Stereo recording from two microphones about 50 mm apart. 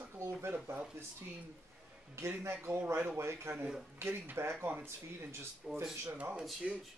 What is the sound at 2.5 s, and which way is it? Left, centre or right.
Speech, right.